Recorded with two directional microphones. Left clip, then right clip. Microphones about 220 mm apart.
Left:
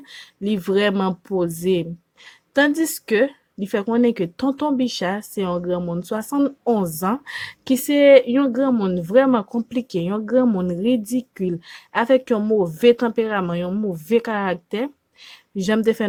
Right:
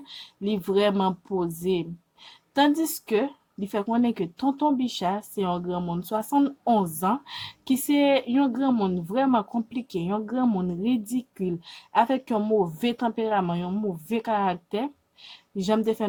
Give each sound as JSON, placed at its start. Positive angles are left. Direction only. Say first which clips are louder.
{"t": 0.1, "sound": "speech", "louder": "left 4 dB", "side_deg": 25}